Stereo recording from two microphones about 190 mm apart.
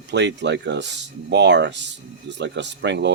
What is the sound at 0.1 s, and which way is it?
Speech, 65° right (ahead or behind).